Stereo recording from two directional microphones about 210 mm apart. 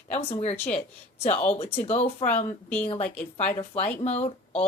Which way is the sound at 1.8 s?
30° left (ahead or behind).